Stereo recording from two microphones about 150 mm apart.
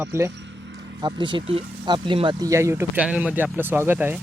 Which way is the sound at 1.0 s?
30° right (ahead or behind).